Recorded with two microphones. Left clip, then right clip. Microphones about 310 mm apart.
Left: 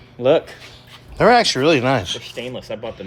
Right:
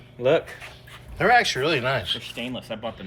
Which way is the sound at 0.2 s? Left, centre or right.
Left.